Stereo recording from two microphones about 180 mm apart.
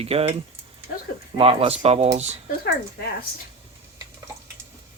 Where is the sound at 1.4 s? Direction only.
30° right (ahead or behind).